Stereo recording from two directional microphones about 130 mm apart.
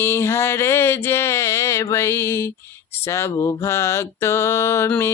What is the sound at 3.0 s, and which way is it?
Speech, 20° left (ahead or behind).